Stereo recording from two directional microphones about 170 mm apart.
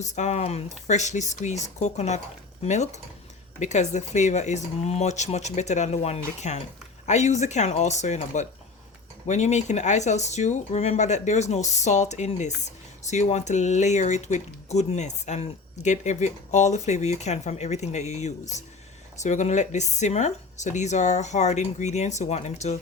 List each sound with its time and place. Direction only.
0.0 s speech: 45° left (ahead or behind)